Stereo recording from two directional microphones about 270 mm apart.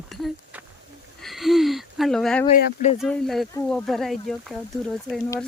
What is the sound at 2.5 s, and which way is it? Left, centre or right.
Speech, left.